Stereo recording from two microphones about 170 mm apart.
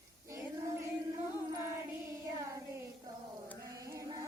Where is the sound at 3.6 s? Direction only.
20° right (ahead or behind).